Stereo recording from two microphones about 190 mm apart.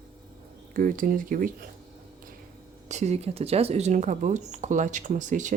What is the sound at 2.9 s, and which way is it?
Speech, 35° right (ahead or behind).